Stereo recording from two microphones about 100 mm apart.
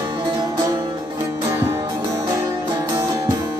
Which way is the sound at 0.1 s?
45° right (ahead or behind).